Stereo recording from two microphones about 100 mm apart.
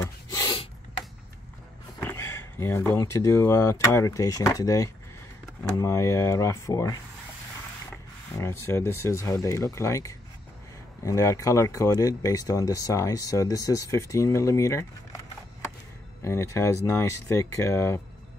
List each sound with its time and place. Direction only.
0.3 s a sound: 35° left (ahead or behind)
2.0 s speech: 25° left (ahead or behind)
8.4 s speech: 25° left (ahead or behind)
16.3 s speech: 30° left (ahead or behind)